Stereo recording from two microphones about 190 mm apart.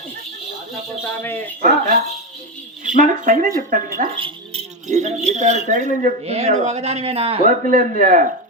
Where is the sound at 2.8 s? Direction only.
45° right (ahead or behind).